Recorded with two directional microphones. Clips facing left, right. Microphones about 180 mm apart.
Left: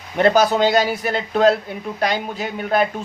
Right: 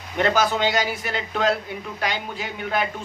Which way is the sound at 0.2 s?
40° left (ahead or behind).